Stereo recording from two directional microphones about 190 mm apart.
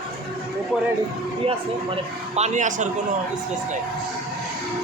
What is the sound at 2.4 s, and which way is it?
Speech, 40° right (ahead or behind).